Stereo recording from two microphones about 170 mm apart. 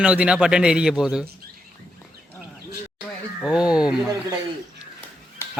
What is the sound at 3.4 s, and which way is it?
Speech, 5° right (ahead or behind).